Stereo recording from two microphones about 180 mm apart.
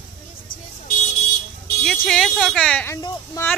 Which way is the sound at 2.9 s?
20° left (ahead or behind).